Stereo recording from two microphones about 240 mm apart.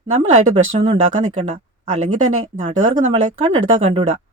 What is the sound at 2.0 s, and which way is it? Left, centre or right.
Speech, right.